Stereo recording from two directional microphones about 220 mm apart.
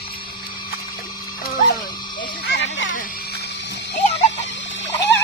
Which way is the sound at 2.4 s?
55° left (ahead or behind).